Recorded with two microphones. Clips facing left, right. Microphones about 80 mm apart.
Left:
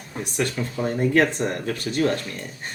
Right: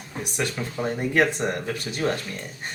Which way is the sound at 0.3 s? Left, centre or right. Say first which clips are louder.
Left 3 dB; centre.